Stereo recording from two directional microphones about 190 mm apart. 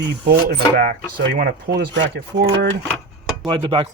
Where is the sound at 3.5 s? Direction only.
25° right (ahead or behind).